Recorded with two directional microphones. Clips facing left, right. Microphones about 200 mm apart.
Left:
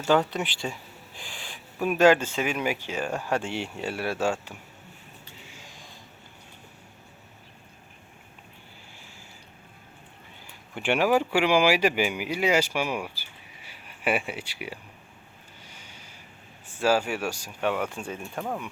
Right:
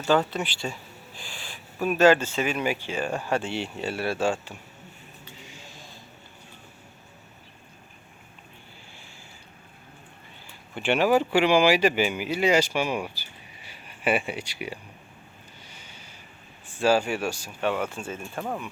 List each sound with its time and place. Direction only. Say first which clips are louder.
0.3 s speech: even; 20° left (ahead or behind)
5.5 s a sound: right 2 dB; 15° left (ahead or behind)
10.8 s speech: right 1 dB; 10° left (ahead or behind)
15.7 s a sound: right 1 dB; 10° left (ahead or behind)
16.8 s speech: right 2 dB; 10° left (ahead or behind)
18.3 s speech: even; centre (ahead or behind)